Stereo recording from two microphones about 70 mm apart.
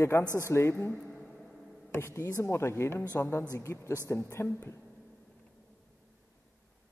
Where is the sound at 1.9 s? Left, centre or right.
Left.